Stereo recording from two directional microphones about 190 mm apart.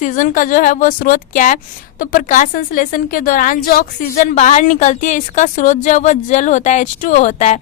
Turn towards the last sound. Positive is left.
turn(degrees=40)  # may be behind; listen again after turning